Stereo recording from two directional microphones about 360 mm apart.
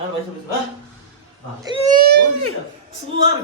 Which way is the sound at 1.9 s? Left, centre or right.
Right.